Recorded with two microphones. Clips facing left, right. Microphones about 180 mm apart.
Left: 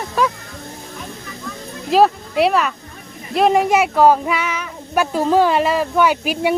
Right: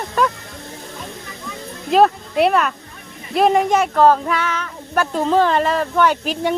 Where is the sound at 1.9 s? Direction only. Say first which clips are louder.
Even; 5° left (ahead or behind).